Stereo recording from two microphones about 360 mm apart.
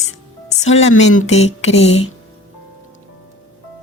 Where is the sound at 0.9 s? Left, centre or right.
Left.